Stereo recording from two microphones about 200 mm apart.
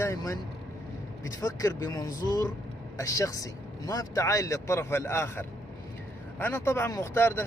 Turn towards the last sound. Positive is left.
turn(degrees=10)  # may be behind; listen again after turning